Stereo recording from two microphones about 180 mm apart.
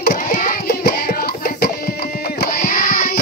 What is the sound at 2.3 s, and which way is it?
Child singing, 50° left (ahead or behind).